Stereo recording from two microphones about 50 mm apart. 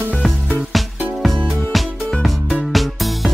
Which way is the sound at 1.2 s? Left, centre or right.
Centre.